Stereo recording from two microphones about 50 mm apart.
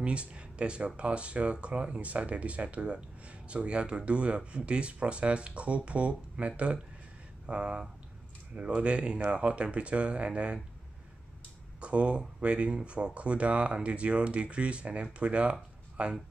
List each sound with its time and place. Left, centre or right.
0.0 s speech: right
11.8 s speech: right